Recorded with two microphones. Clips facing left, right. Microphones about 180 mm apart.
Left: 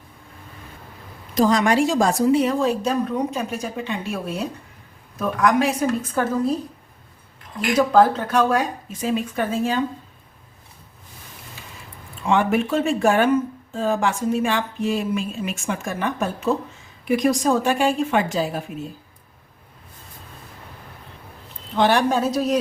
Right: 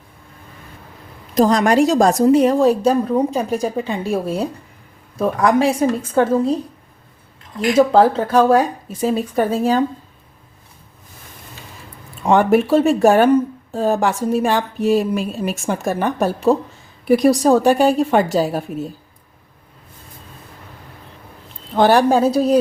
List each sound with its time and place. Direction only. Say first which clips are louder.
1.4 s speech: right 4 dB; 40° right (ahead or behind)
7.8 s speech: right 4 dB; 30° right (ahead or behind)
12.2 s speech: right 6 dB; 40° right (ahead or behind)
21.8 s speech: right 5 dB; 40° right (ahead or behind)